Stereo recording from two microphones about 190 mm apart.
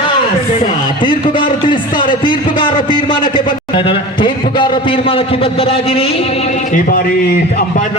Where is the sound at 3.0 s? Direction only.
25° left (ahead or behind).